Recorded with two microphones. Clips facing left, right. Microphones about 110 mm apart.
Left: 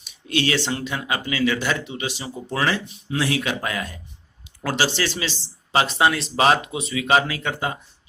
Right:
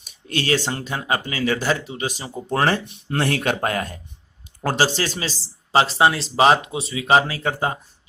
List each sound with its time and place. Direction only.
0.0 s speech: 45° right (ahead or behind)
5.7 s speech: 30° right (ahead or behind)